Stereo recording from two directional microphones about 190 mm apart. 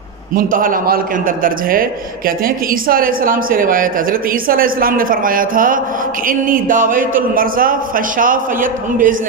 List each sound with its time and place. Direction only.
0.3 s a man's voice: 45° right (ahead or behind)